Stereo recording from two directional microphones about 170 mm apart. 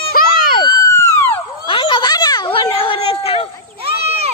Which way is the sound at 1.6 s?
30° left (ahead or behind).